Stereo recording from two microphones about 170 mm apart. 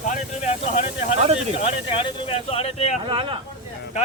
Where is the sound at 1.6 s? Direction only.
35° left (ahead or behind).